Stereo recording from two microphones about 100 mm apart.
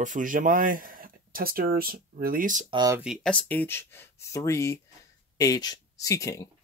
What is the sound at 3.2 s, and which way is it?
Speech, 10° left (ahead or behind).